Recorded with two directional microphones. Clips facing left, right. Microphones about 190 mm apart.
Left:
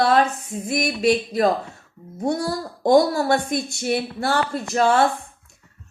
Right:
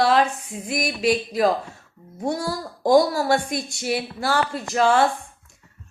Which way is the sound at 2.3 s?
25° left (ahead or behind).